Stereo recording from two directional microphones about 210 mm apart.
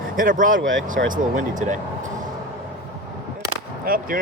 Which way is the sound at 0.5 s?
65° right (ahead or behind).